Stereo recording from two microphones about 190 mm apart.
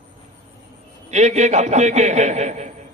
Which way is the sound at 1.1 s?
35° right (ahead or behind).